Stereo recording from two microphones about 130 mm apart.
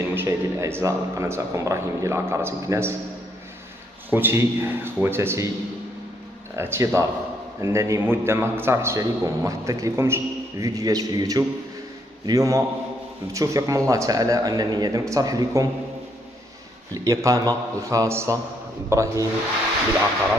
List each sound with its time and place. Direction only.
0.0 s a man's voice: 20° right (ahead or behind)
4.1 s a man's voice: 20° right (ahead or behind)
6.5 s a man's voice: 20° right (ahead or behind)
16.9 s a man's voice: 25° right (ahead or behind)